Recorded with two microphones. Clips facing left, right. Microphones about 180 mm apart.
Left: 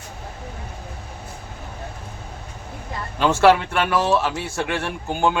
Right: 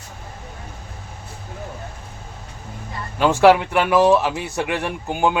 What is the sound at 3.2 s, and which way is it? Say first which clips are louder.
Speech: right 2 dB; 15° right (ahead or behind).